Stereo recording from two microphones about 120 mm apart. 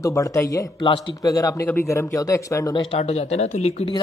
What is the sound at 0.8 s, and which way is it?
Speech, 45° left (ahead or behind).